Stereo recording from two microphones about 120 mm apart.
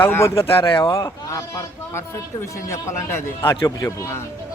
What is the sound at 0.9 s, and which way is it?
Speech, 25° left (ahead or behind).